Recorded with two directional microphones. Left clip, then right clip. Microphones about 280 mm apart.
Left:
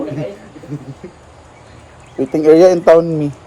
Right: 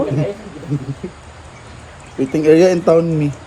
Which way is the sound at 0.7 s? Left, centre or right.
Centre.